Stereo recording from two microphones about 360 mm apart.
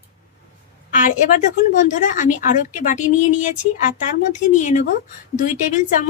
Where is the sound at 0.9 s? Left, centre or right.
Left.